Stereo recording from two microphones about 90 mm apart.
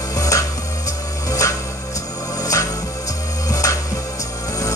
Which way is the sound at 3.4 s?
40° left (ahead or behind).